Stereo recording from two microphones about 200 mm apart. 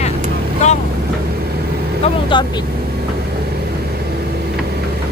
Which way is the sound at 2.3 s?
25° left (ahead or behind).